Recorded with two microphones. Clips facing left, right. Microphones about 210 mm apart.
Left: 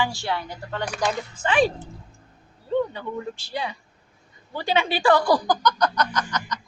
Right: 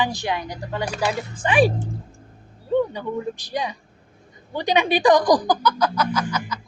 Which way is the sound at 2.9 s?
15° right (ahead or behind).